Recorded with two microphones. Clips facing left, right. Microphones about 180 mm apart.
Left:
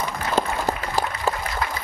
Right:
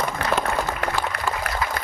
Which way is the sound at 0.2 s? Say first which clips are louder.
Left 2 dB; 65° right (ahead or behind).